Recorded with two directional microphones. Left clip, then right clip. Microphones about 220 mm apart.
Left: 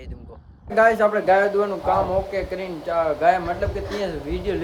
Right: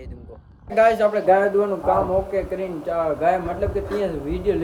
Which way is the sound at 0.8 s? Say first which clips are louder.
Even; 5° right (ahead or behind).